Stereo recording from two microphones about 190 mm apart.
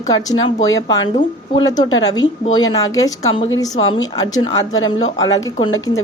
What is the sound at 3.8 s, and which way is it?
Speech, 90° left.